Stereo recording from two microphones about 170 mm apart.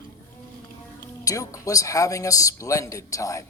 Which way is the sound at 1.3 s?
20° left (ahead or behind).